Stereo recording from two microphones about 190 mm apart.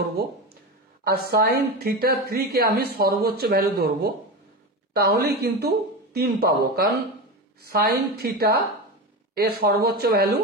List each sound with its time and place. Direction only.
1.0 s speech: 55° right (ahead or behind)